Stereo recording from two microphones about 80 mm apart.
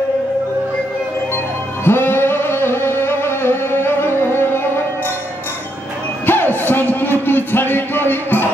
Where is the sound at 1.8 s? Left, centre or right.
Left.